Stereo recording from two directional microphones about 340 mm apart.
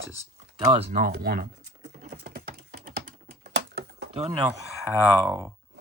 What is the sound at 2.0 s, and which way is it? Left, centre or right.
Typing, right.